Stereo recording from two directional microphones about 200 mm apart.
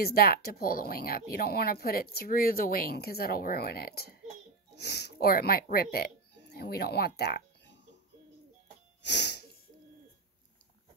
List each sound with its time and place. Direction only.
0.0 s speech: 50° left (ahead or behind)
9.0 s sneeze: 60° left (ahead or behind)